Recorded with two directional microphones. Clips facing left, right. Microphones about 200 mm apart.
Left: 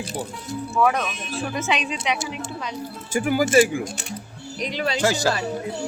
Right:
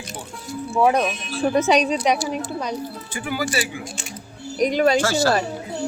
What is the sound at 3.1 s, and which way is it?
Speech, 45° left (ahead or behind).